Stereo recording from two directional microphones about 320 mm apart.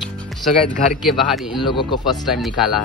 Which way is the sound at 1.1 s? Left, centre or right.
Centre.